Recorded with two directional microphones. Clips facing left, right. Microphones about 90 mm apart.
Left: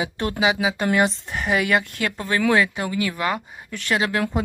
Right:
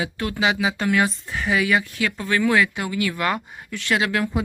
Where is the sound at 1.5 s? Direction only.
55° left (ahead or behind).